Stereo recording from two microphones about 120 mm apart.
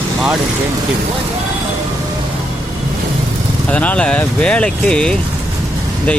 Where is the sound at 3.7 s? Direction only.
10° left (ahead or behind).